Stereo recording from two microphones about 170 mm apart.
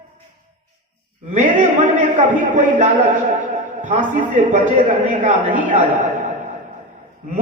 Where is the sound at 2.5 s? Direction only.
45° right (ahead or behind).